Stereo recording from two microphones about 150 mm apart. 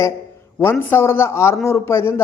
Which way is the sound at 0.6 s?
15° left (ahead or behind).